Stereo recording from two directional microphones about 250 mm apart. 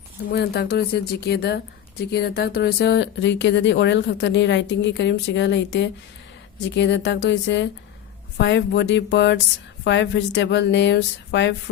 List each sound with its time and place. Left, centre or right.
0.3 s speech: left